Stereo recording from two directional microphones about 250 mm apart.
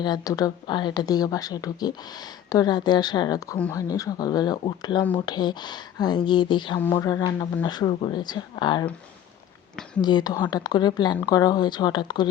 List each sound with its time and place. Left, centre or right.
0.0 s speech: centre
10.0 s speech: centre